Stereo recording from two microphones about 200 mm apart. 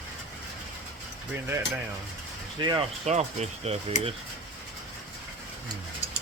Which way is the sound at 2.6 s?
20° right (ahead or behind).